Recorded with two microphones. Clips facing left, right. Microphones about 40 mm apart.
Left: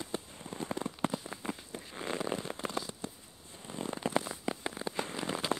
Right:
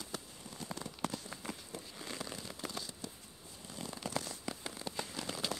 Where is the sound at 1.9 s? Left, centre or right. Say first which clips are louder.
Left 11 dB; left.